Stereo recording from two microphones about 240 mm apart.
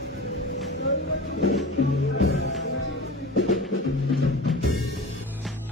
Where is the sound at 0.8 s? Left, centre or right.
Left.